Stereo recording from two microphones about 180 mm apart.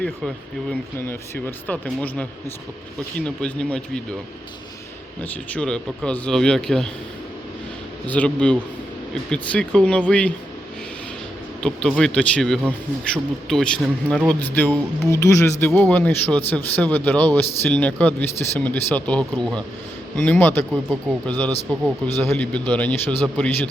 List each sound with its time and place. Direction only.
0.0 s speech: centre (ahead or behind)
0.9 s speech: 10° left (ahead or behind)
5.5 s speech: 5° left (ahead or behind)
8.0 s speech: 10° left (ahead or behind)
11.6 s speech: 5° left (ahead or behind)